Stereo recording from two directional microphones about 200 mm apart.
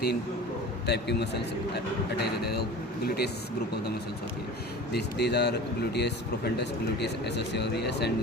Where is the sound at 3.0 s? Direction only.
50° left (ahead or behind).